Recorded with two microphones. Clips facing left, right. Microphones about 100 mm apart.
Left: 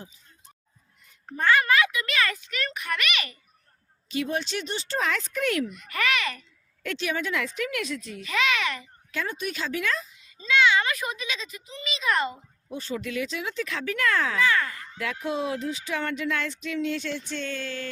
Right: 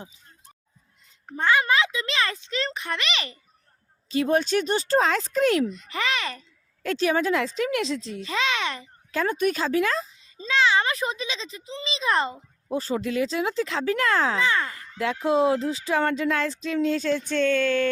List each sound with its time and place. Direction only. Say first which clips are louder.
1.4 s a child's voice: even; 20° right (ahead or behind)
4.1 s a child's voice: right 7 dB; 40° right (ahead or behind)
9.2 s a child's voice: right 9 dB; 50° right (ahead or behind)